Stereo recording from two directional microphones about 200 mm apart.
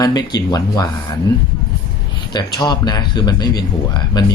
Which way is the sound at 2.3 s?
20° left (ahead or behind).